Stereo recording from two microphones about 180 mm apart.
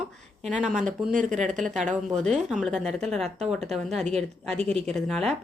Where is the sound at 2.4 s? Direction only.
5° right (ahead or behind).